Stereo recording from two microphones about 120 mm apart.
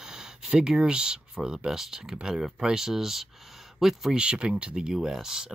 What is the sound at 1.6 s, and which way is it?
Speech, 5° right (ahead or behind).